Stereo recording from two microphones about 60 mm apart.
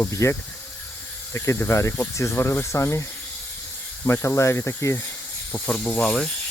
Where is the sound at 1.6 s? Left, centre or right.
Left.